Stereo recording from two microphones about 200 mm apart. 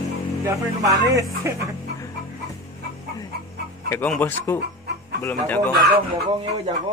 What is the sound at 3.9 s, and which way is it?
Speech, 10° left (ahead or behind).